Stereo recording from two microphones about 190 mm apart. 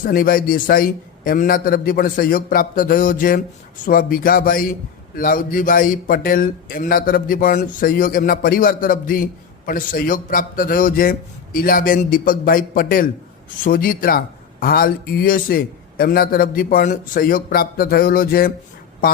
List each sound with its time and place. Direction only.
0.0 s speech: 50° left (ahead or behind)